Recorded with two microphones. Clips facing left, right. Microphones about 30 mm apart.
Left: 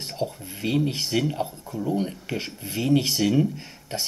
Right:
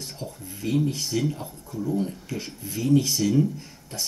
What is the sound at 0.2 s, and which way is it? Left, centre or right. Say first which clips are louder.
Speech: left 6 dB; left.